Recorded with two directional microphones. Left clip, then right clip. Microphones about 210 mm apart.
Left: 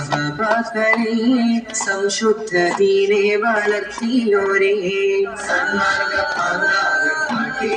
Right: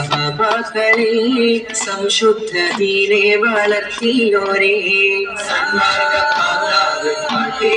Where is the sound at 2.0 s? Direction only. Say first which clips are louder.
Right 7 dB; 50° left (ahead or behind).